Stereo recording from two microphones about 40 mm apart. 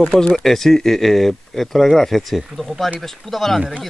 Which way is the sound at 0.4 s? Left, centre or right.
Centre.